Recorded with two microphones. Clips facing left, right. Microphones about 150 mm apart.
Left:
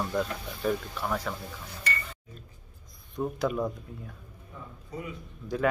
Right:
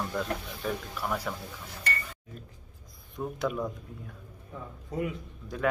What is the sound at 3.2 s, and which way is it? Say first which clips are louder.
Speech: left 2 dB; centre (ahead or behind).